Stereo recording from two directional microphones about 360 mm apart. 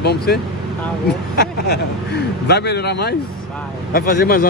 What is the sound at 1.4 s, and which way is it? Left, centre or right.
A man's voice, left.